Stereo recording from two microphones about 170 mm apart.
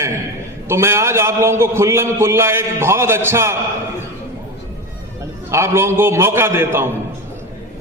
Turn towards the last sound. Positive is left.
turn(degrees=-15)  # may be behind; listen again after turning